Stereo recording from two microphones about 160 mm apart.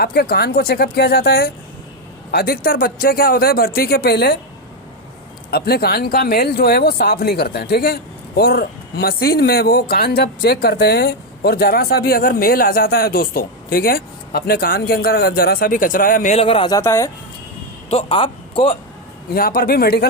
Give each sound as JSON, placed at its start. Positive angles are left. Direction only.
{"t": 0.0, "sound": "speech", "side_deg": 75}
{"t": 5.5, "sound": "speech", "side_deg": 75}
{"t": 16.3, "sound": "a man's voice", "side_deg": 35}
{"t": 16.7, "sound": "speech", "side_deg": 20}
{"t": 17.8, "sound": "a man's voice", "side_deg": 35}
{"t": 19.3, "sound": "speech", "side_deg": 65}